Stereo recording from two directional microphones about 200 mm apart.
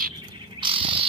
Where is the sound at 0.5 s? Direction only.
25° right (ahead or behind).